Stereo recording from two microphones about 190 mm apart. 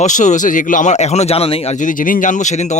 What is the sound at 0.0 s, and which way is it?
Speech, 40° left (ahead or behind).